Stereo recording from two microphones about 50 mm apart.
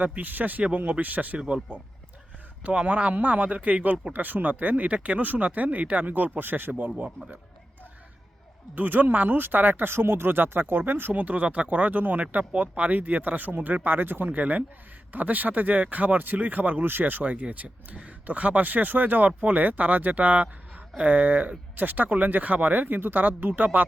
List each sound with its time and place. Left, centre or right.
0.0 s speech: right
2.6 s speech: right
8.7 s speech: right
11.1 s speech: right